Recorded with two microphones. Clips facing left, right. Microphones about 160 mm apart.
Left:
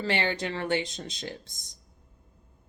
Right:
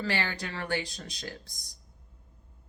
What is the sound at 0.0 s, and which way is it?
Speech, 25° left (ahead or behind).